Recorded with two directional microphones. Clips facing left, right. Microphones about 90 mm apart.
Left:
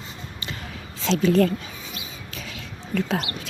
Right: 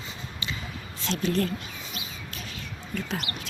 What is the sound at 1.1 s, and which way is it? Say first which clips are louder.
Speech: left 8 dB; 90° left.